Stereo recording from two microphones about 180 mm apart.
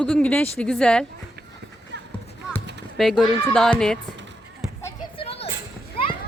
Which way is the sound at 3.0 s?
Centre (ahead or behind).